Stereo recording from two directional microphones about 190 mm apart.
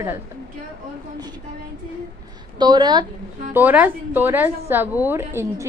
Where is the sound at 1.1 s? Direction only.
20° right (ahead or behind).